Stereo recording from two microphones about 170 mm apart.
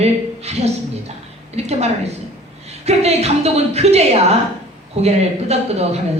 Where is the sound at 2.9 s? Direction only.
40° right (ahead or behind).